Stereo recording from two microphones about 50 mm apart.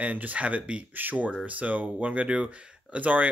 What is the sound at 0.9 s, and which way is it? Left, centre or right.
Speech, right.